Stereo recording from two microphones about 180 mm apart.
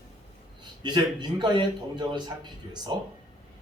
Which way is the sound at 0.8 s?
25° right (ahead or behind).